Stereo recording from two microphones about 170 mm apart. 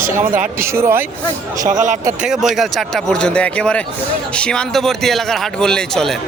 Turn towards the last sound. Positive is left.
turn(degrees=5)  # may be behind; listen again after turning